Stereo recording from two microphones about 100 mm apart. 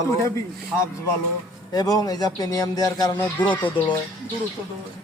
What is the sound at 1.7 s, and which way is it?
A man's voice, 40° left (ahead or behind).